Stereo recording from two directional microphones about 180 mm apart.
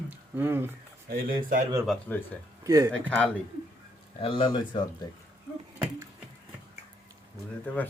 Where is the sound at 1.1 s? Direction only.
55° right (ahead or behind).